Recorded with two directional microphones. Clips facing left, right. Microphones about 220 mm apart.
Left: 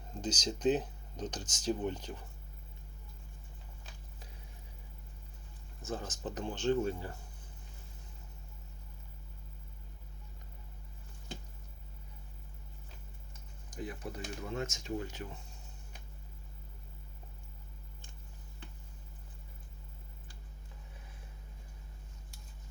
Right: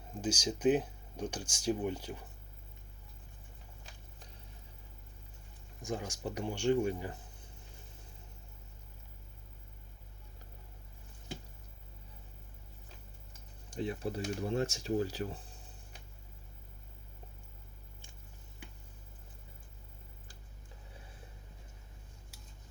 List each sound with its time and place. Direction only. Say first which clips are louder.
0.1 s speech: right 2 dB; 10° right (ahead or behind)
5.8 s speech: right 1 dB; 15° right (ahead or behind)
13.7 s speech: right 5 dB; 30° right (ahead or behind)